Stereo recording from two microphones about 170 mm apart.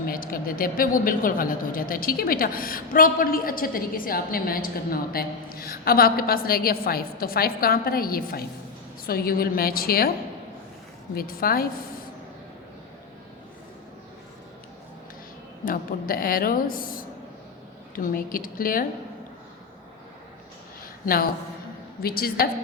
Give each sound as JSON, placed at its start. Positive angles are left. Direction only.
{"t": 0.1, "sound": "a woman's voice", "side_deg": 55}
{"t": 11.1, "sound": "a woman's voice", "side_deg": 60}
{"t": 15.6, "sound": "a woman's voice", "side_deg": 60}
{"t": 22.0, "sound": "a woman's voice", "side_deg": 60}